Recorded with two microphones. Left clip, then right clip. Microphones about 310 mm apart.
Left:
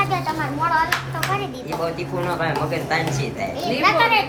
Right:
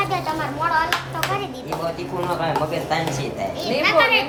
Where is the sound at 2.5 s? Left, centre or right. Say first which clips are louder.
Even; centre.